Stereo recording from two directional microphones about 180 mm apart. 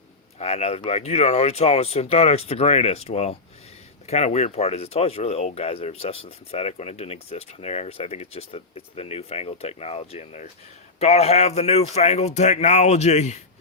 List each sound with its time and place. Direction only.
0.3 s speech: 35° left (ahead or behind)